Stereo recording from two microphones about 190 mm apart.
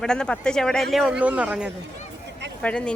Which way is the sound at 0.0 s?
5° left (ahead or behind).